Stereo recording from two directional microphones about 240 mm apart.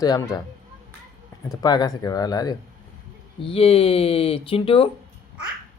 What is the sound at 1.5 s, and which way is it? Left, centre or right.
A man's voice, centre.